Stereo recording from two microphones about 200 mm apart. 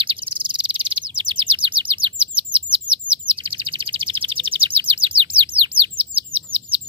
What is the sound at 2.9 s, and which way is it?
Chirp, 25° right (ahead or behind).